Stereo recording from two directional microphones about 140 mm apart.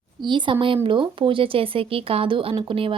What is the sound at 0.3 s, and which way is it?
Speech, 35° right (ahead or behind).